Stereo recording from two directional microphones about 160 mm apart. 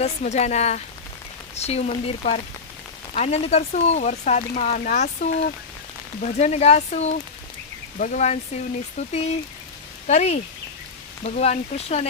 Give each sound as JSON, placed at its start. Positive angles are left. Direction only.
{"t": 0.0, "sound": "speech", "side_deg": 45}